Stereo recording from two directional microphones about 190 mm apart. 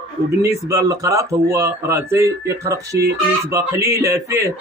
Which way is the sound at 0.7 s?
20° right (ahead or behind).